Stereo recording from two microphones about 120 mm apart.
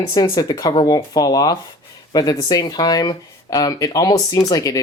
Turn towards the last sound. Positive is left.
turn(degrees=30)  # may be behind; listen again after turning